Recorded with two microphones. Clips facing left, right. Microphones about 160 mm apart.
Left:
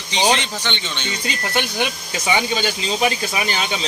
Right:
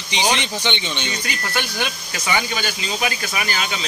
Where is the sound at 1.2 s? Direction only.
20° left (ahead or behind).